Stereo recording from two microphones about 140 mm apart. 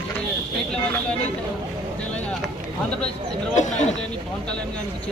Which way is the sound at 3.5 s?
60° left (ahead or behind).